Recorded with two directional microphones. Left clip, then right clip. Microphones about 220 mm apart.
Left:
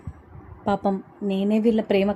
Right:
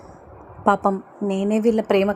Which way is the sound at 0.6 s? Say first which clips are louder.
Right 6 dB; 25° right (ahead or behind).